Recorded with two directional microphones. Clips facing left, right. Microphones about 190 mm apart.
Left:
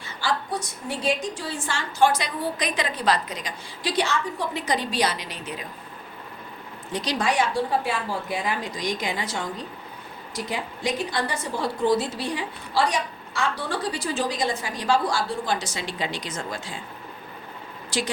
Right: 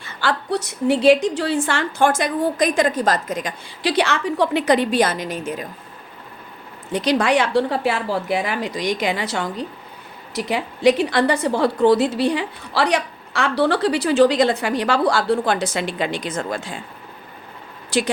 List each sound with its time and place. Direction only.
0.0 s a woman's voice: 65° right (ahead or behind)
3.8 s a woman's voice: 75° right (ahead or behind); by 5.6 s 45° right (ahead or behind)
6.9 s a woman's voice: 60° right (ahead or behind)
17.9 s speech: 60° right (ahead or behind)